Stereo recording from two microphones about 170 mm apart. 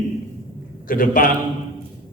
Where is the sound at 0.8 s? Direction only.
55° left (ahead or behind).